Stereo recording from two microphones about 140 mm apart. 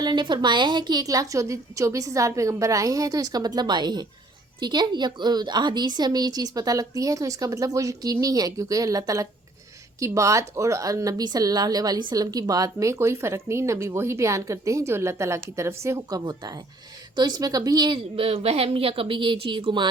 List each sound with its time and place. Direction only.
0.0 s a woman's voice: 35° right (ahead or behind)